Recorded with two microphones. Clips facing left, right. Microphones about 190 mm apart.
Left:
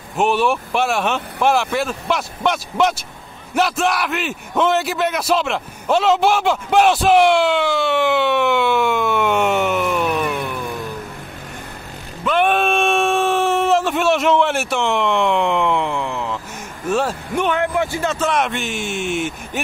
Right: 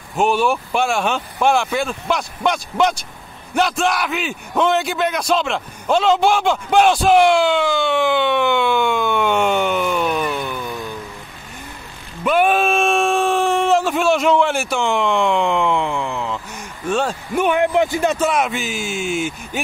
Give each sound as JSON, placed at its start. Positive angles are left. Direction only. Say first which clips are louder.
{"t": 0.1, "sound": "a man's voice", "louder": "even", "side_deg": 0}
{"t": 12.3, "sound": "a sound", "louder": "right 1 dB", "side_deg": -5}
{"t": 16.9, "sound": "speech", "louder": "even", "side_deg": 0}
{"t": 17.5, "sound": "speech", "louder": "right 5 dB", "side_deg": -20}
{"t": 18.3, "sound": "a man's voice", "louder": "even", "side_deg": 0}